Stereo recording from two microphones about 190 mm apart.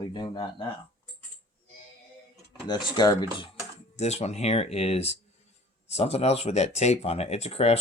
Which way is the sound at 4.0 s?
35° left (ahead or behind).